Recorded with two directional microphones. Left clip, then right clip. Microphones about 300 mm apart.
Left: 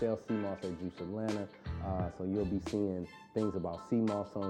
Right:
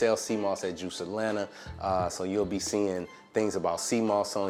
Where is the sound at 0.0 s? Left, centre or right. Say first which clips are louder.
Right 8 dB; centre.